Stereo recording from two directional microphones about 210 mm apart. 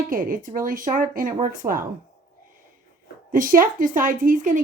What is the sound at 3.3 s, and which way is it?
Speech, 40° right (ahead or behind).